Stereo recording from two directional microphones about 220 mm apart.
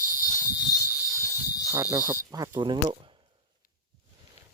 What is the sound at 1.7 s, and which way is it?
Cricket, 10° right (ahead or behind).